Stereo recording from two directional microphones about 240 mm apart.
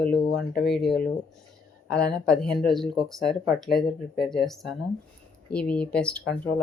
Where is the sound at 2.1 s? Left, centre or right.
Centre.